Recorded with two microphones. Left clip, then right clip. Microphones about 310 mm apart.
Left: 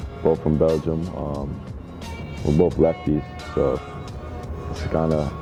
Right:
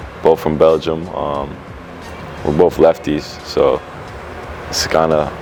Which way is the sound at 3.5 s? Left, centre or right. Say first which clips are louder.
Right 9 dB; centre.